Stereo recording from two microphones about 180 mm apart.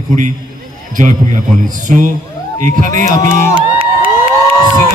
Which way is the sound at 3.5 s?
30° right (ahead or behind).